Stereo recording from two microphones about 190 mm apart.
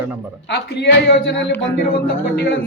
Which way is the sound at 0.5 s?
60° left (ahead or behind).